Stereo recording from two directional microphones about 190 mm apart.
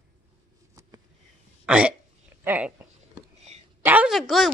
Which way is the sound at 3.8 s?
10° right (ahead or behind).